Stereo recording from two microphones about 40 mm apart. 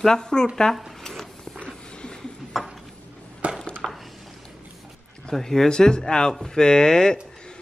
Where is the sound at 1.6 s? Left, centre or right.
Left.